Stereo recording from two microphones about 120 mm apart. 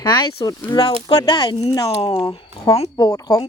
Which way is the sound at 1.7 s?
30° left (ahead or behind).